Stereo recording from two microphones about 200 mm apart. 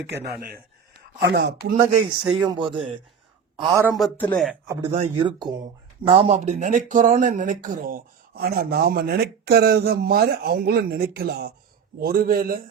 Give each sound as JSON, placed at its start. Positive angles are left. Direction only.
{"t": 0.0, "sound": "speech", "side_deg": -55}
{"t": 2.3, "sound": "speech", "side_deg": -20}
{"t": 4.2, "sound": "speech", "side_deg": 5}
{"t": 4.8, "sound": "speech", "side_deg": -30}